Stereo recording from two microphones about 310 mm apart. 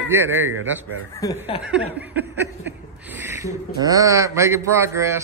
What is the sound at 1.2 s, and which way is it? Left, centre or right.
Speech, centre.